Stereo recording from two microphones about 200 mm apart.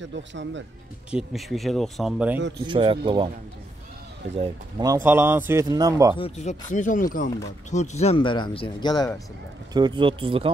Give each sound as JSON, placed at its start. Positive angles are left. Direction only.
{"t": 0.1, "sound": "speech", "side_deg": -65}
{"t": 1.1, "sound": "speech", "side_deg": 0}
{"t": 2.6, "sound": "speech", "side_deg": -25}
{"t": 4.4, "sound": "speech", "side_deg": -20}
{"t": 6.1, "sound": "speech", "side_deg": 30}
{"t": 9.8, "sound": "speech", "side_deg": -25}